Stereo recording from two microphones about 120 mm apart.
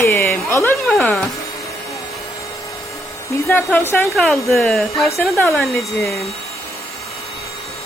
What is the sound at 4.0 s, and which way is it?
Speech, centre (ahead or behind).